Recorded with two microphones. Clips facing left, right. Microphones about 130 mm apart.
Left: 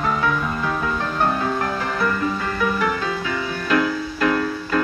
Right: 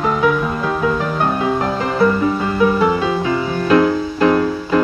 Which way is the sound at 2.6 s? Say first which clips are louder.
Right 8 dB; 25° right (ahead or behind).